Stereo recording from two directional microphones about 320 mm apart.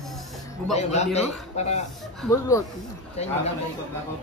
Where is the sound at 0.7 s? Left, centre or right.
Centre.